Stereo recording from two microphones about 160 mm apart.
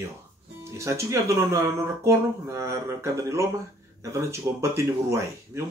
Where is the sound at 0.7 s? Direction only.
20° right (ahead or behind).